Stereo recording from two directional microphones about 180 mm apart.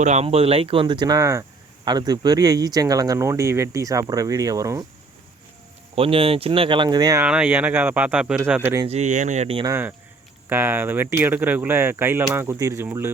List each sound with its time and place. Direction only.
0.0 s speech: 40° right (ahead or behind); by 4.9 s 20° right (ahead or behind)
6.0 s speech: 30° right (ahead or behind)
7.3 s speech: 5° right (ahead or behind)
8.9 s speech: 40° right (ahead or behind)
9.6 s speech: 10° right (ahead or behind)